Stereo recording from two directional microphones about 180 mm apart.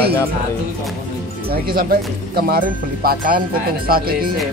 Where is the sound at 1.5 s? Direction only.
55° right (ahead or behind).